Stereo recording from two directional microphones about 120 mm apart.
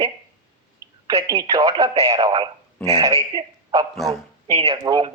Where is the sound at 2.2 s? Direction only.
40° right (ahead or behind).